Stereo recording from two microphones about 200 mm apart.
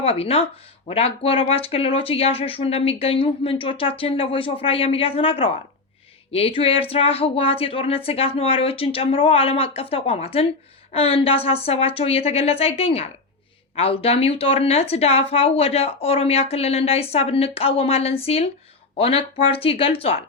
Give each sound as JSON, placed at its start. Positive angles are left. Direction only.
{"t": 0.0, "sound": "speech", "side_deg": 30}